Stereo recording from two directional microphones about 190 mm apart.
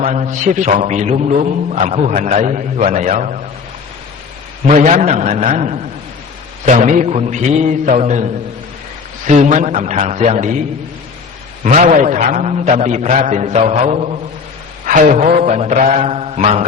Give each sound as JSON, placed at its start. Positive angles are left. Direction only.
{"t": 0.0, "sound": "a man's voice", "side_deg": -35}
{"t": 4.6, "sound": "a man's voice", "side_deg": -35}
{"t": 9.2, "sound": "a man's voice", "side_deg": -40}
{"t": 11.6, "sound": "a man's voice", "side_deg": -40}
{"t": 14.8, "sound": "a man's voice", "side_deg": -45}